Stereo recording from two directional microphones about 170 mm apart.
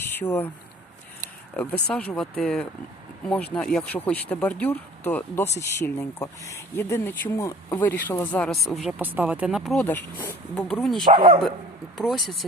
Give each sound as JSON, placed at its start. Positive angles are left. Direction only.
{"t": 0.0, "sound": "speech", "side_deg": 10}
{"t": 1.5, "sound": "speech", "side_deg": 5}
{"t": 9.0, "sound": "speech", "side_deg": -10}
{"t": 9.8, "sound": "speech", "side_deg": 10}
{"t": 11.0, "sound": "speech", "side_deg": -30}
{"t": 11.9, "sound": "speech", "side_deg": 0}